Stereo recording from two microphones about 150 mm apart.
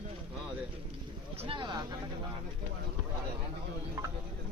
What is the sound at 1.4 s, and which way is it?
Boat, 35° right (ahead or behind).